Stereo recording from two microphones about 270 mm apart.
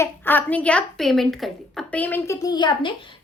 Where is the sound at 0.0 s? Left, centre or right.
Centre.